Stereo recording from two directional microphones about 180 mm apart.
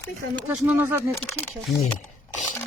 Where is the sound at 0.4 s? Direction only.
10° right (ahead or behind).